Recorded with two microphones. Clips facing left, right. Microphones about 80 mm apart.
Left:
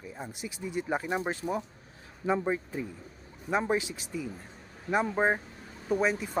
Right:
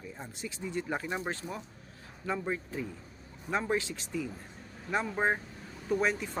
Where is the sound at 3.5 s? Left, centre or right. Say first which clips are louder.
Left 3 dB; centre.